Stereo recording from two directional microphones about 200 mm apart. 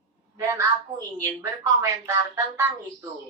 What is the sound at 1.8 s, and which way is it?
Speech, 15° right (ahead or behind).